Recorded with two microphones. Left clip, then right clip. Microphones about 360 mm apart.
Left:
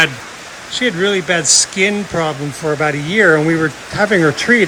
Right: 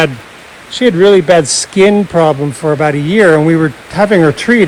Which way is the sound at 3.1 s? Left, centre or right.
Right.